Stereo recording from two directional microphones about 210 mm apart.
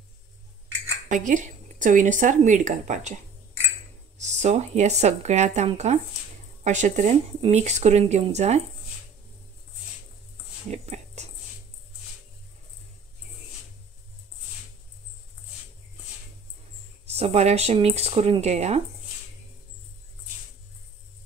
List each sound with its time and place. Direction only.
1.1 s speech: 35° right (ahead or behind)
4.2 s speech: 35° right (ahead or behind)
10.7 s a sound: 30° right (ahead or behind)
17.0 s speech: 30° right (ahead or behind)